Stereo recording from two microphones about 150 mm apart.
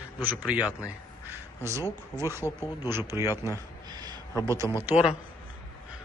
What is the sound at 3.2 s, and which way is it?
Speech, 20° left (ahead or behind).